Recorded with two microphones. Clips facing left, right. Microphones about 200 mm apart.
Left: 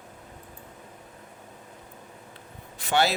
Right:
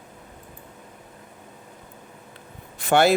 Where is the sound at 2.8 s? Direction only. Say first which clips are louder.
Right 6 dB; 50° right (ahead or behind).